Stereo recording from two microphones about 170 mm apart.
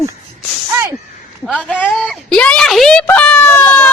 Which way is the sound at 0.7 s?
20° right (ahead or behind).